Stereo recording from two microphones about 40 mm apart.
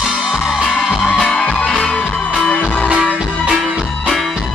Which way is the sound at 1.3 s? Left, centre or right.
Left.